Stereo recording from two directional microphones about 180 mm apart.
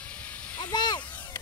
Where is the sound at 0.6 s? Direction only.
25° left (ahead or behind).